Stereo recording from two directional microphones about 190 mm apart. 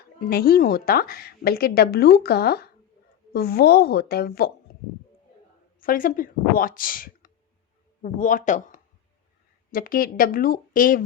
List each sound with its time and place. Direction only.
0.2 s a woman's voice: 50° left (ahead or behind)
5.8 s a woman's voice: 45° left (ahead or behind)